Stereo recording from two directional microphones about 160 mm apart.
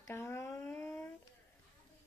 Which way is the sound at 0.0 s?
15° left (ahead or behind).